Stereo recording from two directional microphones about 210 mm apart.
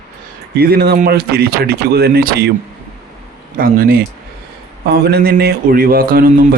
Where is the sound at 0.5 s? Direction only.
50° right (ahead or behind).